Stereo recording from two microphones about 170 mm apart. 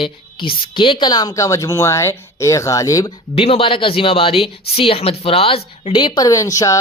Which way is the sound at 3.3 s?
35° left (ahead or behind).